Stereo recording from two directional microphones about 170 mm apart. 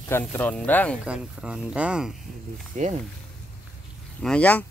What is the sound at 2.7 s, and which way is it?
Speech, 45° right (ahead or behind).